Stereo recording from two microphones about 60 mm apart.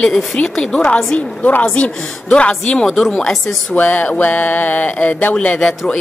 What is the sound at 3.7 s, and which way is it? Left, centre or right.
Speech, left.